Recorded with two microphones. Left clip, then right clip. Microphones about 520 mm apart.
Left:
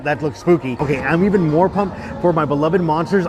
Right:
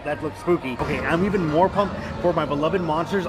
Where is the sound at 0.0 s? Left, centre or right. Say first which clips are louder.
Left 7 dB; left.